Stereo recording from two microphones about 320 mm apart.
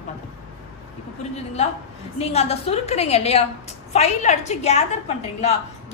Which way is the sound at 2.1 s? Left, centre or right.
Centre.